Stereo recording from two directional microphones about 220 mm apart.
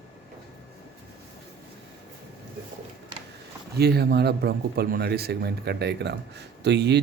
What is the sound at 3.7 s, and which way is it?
Speech, 45° right (ahead or behind).